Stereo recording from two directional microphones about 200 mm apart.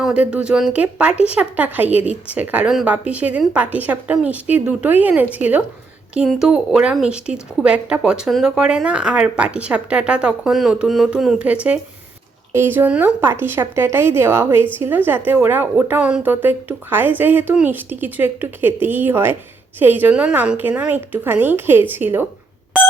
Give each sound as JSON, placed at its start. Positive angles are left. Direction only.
{"t": 0.0, "sound": "a woman's voice", "side_deg": -5}
{"t": 1.1, "sound": "speech", "side_deg": 30}
{"t": 1.4, "sound": "a woman's voice", "side_deg": -5}